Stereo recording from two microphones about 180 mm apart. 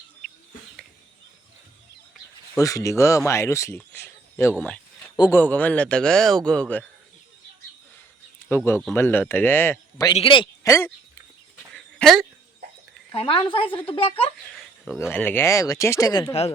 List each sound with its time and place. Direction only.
2.6 s a man's voice: 20° left (ahead or behind)
4.5 s a sound: 5° left (ahead or behind)
5.1 s a man's voice: 20° left (ahead or behind)
5.4 s a man's voice: 10° left (ahead or behind)
8.4 s a man's voice: 15° left (ahead or behind)
10.2 s a man's voice: 30° left (ahead or behind)
10.7 s a man's voice: 15° left (ahead or behind)
11.7 s dog: centre (ahead or behind)
13.1 s a woman's voice: 30° left (ahead or behind)
14.5 s a sound: 10° left (ahead or behind)
15.1 s a man's voice: 10° left (ahead or behind)